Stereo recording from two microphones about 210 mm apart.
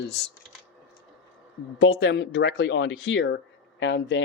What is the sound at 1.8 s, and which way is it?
Speech, 55° left (ahead or behind).